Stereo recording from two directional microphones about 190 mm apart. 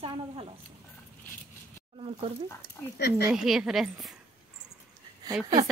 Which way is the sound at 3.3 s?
Centre (ahead or behind).